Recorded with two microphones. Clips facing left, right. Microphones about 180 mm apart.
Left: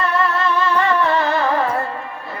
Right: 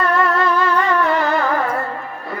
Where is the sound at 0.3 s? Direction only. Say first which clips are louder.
Right 1 dB; 25° left (ahead or behind).